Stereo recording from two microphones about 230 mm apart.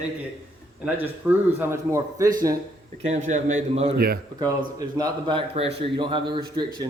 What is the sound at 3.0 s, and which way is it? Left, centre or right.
Speech, right.